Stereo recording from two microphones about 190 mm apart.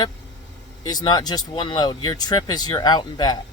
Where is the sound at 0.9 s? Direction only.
20° left (ahead or behind).